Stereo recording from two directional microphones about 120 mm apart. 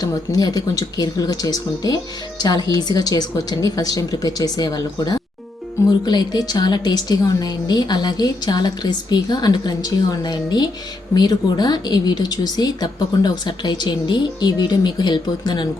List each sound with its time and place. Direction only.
0.0 s a woman's voice: 30° left (ahead or behind)